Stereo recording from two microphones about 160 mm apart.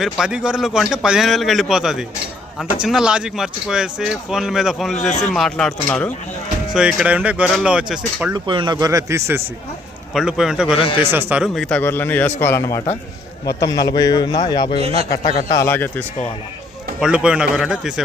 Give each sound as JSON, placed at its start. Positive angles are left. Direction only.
{"t": 0.0, "sound": "speech", "side_deg": -5}
{"t": 6.7, "sound": "speech", "side_deg": -5}
{"t": 8.3, "sound": "speech", "side_deg": -30}
{"t": 10.2, "sound": "speech", "side_deg": -5}
{"t": 10.8, "sound": "speech", "side_deg": 30}
{"t": 11.1, "sound": "speech", "side_deg": -10}
{"t": 11.4, "sound": "a man's voice", "side_deg": 0}
{"t": 14.8, "sound": "speech", "side_deg": -40}
{"t": 15.1, "sound": "a man's voice", "side_deg": 30}
{"t": 17.0, "sound": "speech", "side_deg": -5}